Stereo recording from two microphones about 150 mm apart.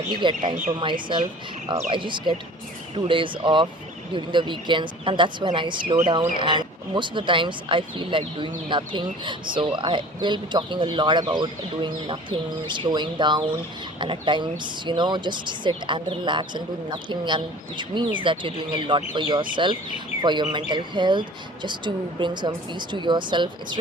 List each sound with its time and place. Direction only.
0.2 s speech: 30° right (ahead or behind)